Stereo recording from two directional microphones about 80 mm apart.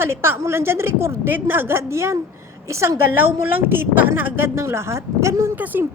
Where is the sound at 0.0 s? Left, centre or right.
Right.